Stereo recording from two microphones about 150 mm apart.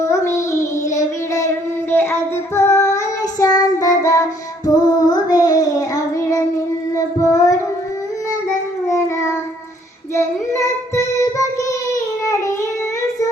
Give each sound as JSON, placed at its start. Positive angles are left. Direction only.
{"t": 0.0, "sound": "child singing", "side_deg": 20}